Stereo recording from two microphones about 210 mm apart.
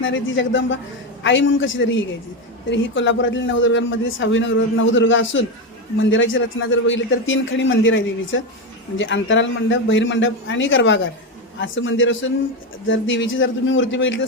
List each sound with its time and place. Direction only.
0.0 s a man's voice: 65° left (ahead or behind)